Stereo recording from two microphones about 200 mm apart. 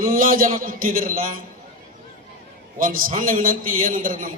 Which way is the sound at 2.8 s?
45° right (ahead or behind).